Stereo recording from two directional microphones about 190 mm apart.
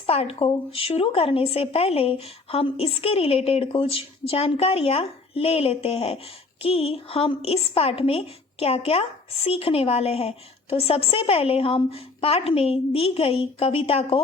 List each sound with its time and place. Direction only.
0.0 s a woman's voice: 30° left (ahead or behind)